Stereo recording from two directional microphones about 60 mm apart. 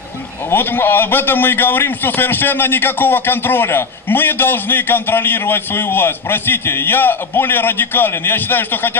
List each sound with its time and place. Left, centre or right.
0.5 s a man's voice: left